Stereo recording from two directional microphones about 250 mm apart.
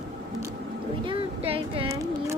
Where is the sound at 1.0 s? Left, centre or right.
Right.